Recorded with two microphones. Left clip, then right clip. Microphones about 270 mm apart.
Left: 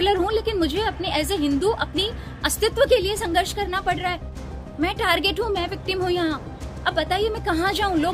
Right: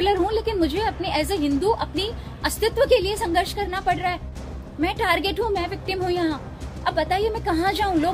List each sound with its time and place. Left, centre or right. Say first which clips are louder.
0.0 s a woman's voice: even; centre